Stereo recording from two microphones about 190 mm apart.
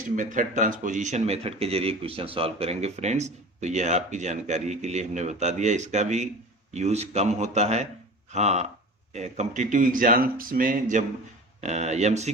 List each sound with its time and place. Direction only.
0.2 s speech: 40° right (ahead or behind)